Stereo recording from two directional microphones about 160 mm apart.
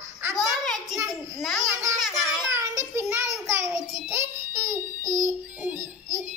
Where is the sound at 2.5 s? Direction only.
20° right (ahead or behind).